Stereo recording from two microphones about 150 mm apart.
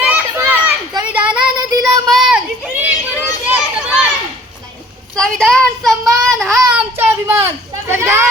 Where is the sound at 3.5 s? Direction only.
10° right (ahead or behind).